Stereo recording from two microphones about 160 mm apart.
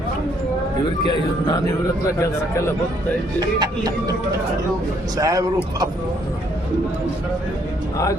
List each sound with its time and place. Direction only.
1.0 s a man's voice: 30° left (ahead or behind)
2.1 s a man's voice: 20° left (ahead or behind)
3.6 s speech: 25° right (ahead or behind)
5.1 s speech: 20° right (ahead or behind)